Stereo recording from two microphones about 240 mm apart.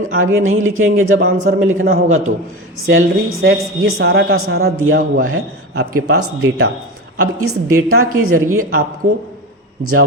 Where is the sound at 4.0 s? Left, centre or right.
Right.